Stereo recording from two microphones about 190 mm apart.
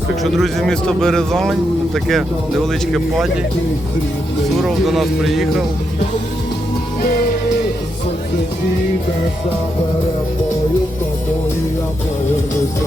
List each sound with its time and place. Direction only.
0.2 s a man's voice: centre (ahead or behind)
4.5 s a man's voice: centre (ahead or behind)
7.0 s music: 50° left (ahead or behind)